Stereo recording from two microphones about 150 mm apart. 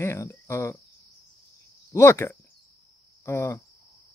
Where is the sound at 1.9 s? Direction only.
20° left (ahead or behind).